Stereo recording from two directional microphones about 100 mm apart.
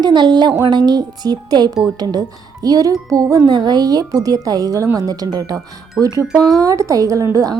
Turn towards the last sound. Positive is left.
turn(degrees=-35)  # may be behind; listen again after turning